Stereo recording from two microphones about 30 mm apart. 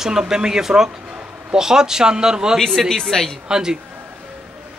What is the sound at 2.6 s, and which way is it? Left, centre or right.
Speech, centre.